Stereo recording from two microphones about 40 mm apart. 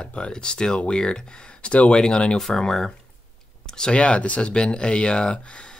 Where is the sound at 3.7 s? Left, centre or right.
Left.